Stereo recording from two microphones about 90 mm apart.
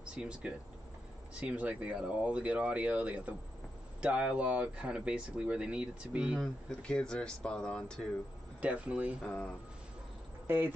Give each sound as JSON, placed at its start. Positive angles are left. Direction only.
{"t": 0.0, "sound": "speech", "side_deg": -10}
{"t": 6.4, "sound": "speech", "side_deg": 10}
{"t": 8.5, "sound": "speech", "side_deg": -15}
{"t": 9.2, "sound": "speech", "side_deg": 10}
{"t": 10.4, "sound": "speech", "side_deg": -20}